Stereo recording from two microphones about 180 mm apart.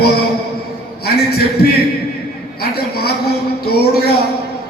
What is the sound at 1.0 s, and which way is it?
A man's voice, 60° left (ahead or behind).